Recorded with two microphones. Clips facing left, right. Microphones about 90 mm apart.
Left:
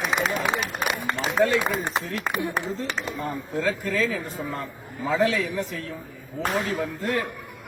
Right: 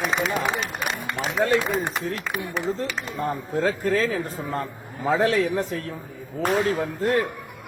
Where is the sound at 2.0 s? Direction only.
40° right (ahead or behind).